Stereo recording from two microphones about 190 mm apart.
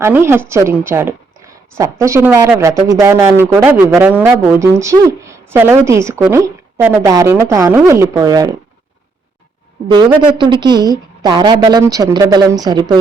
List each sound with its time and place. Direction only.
0.0 s a woman's voice: 15° right (ahead or behind)
10.3 s a woman's voice: 25° right (ahead or behind)